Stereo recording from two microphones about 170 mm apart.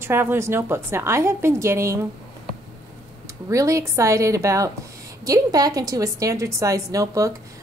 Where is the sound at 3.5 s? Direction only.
20° right (ahead or behind).